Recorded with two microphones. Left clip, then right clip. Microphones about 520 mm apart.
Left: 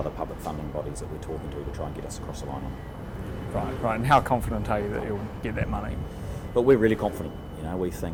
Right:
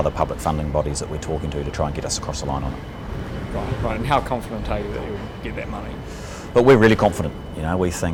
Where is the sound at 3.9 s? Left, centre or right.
Left.